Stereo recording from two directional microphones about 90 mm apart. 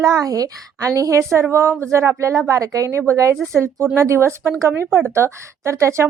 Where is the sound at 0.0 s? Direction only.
45° right (ahead or behind).